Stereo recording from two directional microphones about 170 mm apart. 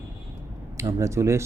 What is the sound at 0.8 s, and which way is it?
Speech, 15° right (ahead or behind).